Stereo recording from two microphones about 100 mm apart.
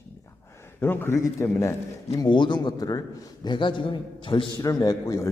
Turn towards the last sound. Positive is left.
turn(degrees=30)  # may be behind; listen again after turning